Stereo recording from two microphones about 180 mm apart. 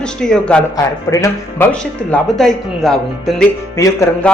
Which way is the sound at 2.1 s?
Centre (ahead or behind).